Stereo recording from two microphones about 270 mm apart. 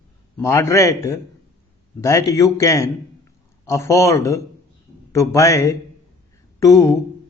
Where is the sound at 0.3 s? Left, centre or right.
Centre.